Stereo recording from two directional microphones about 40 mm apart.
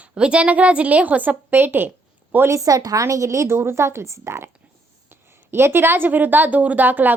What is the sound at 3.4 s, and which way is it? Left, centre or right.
A woman's voice, right.